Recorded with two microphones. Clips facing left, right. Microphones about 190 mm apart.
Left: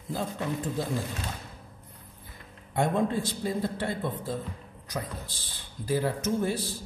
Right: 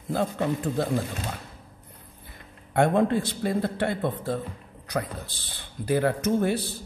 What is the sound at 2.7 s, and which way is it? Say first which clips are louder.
A man's voice: right 5 dB; 65° right (ahead or behind).